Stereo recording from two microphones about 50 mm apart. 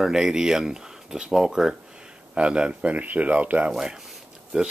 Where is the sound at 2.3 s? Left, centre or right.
Centre.